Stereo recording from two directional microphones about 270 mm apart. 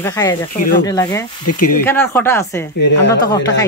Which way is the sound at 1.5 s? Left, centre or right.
Left.